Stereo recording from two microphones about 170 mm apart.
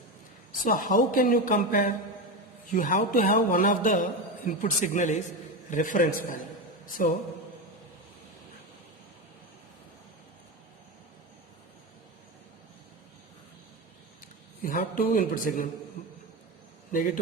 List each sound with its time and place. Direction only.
0.6 s a woman's voice: 50° left (ahead or behind)
14.6 s speech: 55° left (ahead or behind)
16.9 s a woman's voice: 55° left (ahead or behind)